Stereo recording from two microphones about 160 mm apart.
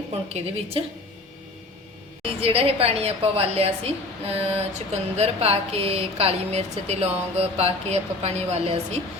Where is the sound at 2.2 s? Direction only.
35° right (ahead or behind).